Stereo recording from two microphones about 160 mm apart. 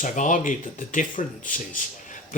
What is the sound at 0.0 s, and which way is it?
Speech, 50° left (ahead or behind).